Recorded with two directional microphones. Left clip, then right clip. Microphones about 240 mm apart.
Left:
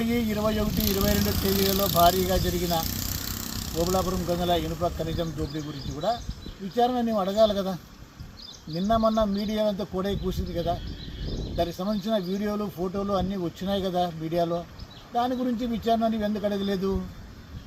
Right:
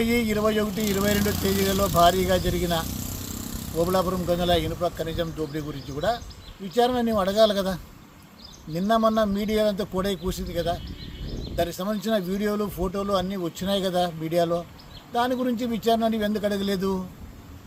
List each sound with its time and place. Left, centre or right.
0.0 s speech: centre
1.6 s speech: centre
3.8 s speech: centre